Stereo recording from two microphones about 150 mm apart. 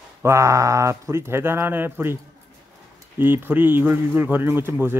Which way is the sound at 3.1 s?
10° right (ahead or behind).